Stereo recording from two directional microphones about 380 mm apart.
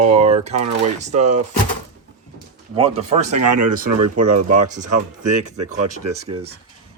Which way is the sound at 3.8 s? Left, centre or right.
Right.